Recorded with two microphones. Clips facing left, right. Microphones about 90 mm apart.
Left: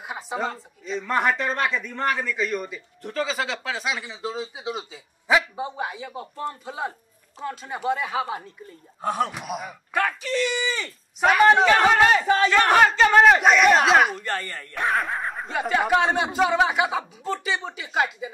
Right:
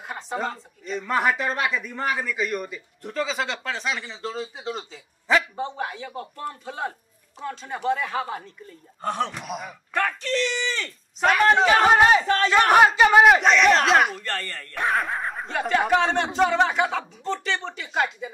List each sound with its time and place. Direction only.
0.0 s a woman's voice: 5° left (ahead or behind)
11.6 s speech: 10° right (ahead or behind)
11.9 s speech: 20° right (ahead or behind)
13.4 s a woman's voice: 5° left (ahead or behind)
14.2 s speech: 15° left (ahead or behind)
14.7 s a woman's voice: centre (ahead or behind)